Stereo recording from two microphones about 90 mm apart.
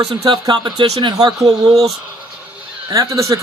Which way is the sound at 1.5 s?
45° right (ahead or behind).